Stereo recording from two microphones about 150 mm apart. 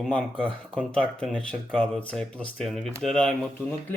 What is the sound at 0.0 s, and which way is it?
Speech, centre (ahead or behind).